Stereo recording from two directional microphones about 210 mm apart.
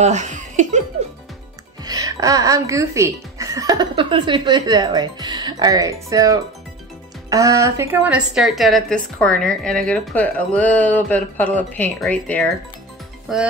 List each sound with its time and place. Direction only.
0.0 s laughter: 35° right (ahead or behind)
1.9 s a woman's voice: 15° right (ahead or behind)